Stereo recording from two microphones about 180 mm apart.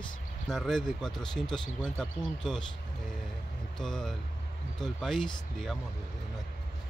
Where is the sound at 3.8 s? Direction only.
5° left (ahead or behind).